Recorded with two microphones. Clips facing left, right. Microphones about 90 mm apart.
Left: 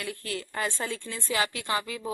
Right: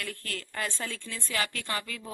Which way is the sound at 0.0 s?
10° left (ahead or behind).